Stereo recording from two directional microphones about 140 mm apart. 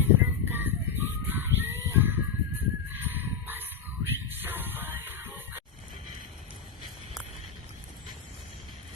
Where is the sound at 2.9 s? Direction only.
15° right (ahead or behind).